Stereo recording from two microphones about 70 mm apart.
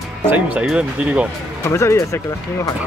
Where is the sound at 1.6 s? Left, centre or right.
Left.